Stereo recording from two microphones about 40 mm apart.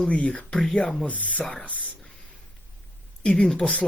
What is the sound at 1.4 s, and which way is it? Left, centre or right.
Speech, centre.